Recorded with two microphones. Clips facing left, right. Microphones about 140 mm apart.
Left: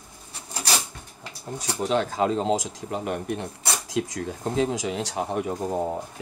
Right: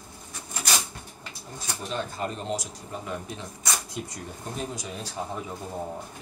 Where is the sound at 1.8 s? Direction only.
90° left; by 3.4 s 65° left (ahead or behind).